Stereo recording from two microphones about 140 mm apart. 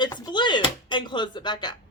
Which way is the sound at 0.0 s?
30° left (ahead or behind).